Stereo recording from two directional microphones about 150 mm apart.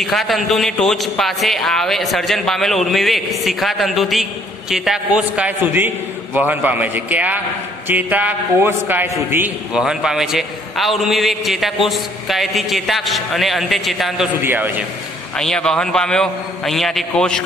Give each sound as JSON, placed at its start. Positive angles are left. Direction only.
{"t": 0.0, "sound": "a man's voice", "side_deg": 0}
{"t": 9.8, "sound": "a man's voice", "side_deg": -5}
{"t": 14.4, "sound": "a man's voice", "side_deg": -15}
{"t": 15.3, "sound": "a man's voice", "side_deg": 5}